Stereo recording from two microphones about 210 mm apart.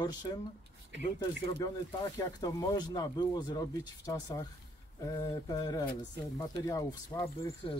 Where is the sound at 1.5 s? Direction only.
20° left (ahead or behind).